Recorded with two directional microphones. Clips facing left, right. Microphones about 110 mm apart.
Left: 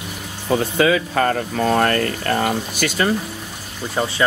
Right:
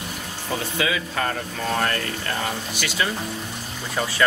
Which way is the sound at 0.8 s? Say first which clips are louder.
Left 8 dB; 50° left (ahead or behind).